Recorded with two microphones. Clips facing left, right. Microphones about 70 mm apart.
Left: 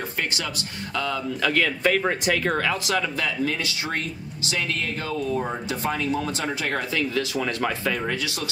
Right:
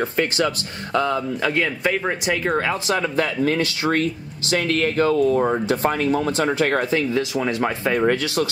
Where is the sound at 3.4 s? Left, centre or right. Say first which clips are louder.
Right 7 dB; right.